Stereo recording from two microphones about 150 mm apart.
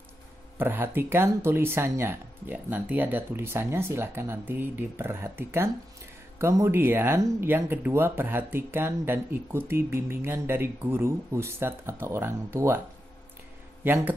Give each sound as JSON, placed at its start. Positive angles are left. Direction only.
{"t": 0.6, "sound": "speech", "side_deg": -15}
{"t": 13.8, "sound": "speech", "side_deg": -15}